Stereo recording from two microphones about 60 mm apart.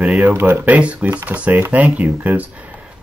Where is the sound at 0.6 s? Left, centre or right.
Right.